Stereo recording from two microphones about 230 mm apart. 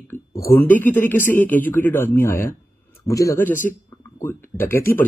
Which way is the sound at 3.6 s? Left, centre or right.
Left.